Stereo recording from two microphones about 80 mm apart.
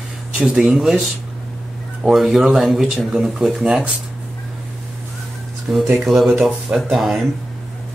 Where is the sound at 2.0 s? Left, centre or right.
Centre.